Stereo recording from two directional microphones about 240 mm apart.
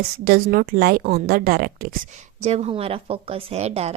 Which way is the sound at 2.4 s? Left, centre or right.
Right.